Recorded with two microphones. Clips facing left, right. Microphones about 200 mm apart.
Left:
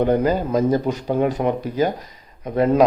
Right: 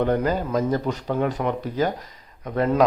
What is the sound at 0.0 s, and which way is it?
Speech, 15° left (ahead or behind).